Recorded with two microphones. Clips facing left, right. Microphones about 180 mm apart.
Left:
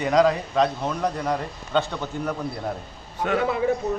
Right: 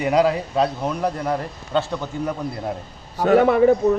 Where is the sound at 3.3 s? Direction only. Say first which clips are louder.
Right 9 dB; 65° right (ahead or behind).